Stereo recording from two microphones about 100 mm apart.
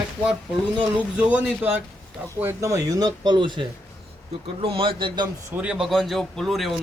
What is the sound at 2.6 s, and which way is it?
Speech, 35° right (ahead or behind).